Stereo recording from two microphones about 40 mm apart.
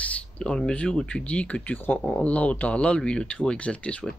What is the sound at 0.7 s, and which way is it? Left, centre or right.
Speech, left.